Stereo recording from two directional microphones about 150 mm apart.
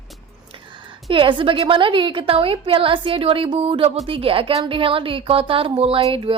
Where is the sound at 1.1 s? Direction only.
35° right (ahead or behind).